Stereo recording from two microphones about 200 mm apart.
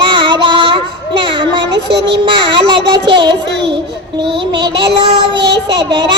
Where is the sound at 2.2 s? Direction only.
25° right (ahead or behind).